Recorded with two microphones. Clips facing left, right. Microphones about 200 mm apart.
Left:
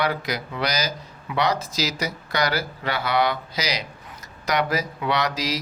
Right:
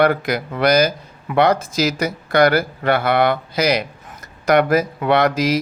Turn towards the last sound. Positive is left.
turn(degrees=-55)  # may be behind; listen again after turning